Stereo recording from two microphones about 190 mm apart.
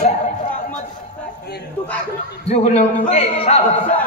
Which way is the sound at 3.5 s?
35° left (ahead or behind).